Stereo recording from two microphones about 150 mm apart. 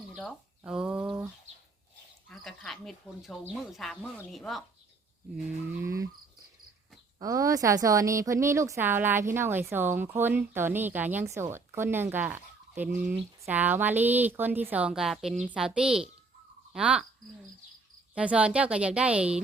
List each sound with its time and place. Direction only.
0.1 s speech: centre (ahead or behind)
2.3 s speech: 5° left (ahead or behind)
5.8 s cricket: 20° right (ahead or behind)
7.2 s speech: 20° right (ahead or behind); by 17.1 s 5° right (ahead or behind)
18.1 s speech: 10° right (ahead or behind)